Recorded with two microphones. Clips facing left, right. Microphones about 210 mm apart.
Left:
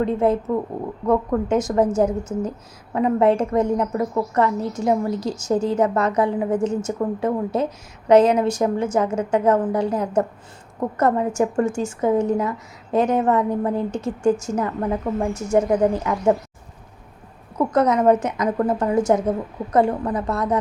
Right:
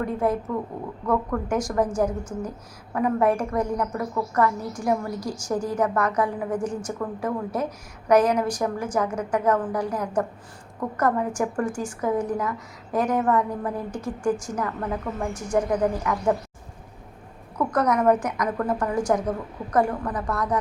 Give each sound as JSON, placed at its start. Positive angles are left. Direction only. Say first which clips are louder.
{"t": 0.0, "sound": "a woman's voice", "louder": "left 5 dB", "side_deg": 25}
{"t": 17.6, "sound": "a woman's voice", "louder": "left 4 dB", "side_deg": 20}